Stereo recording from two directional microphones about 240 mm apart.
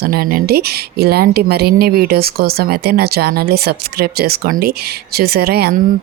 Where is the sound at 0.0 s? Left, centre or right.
Right.